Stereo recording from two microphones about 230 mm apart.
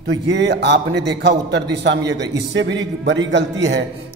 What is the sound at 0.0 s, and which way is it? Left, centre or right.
A man's voice, right.